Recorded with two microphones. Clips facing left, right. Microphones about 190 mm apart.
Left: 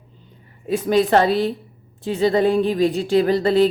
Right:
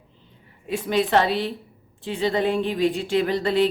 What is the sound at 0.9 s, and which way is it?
A woman's voice, 40° left (ahead or behind).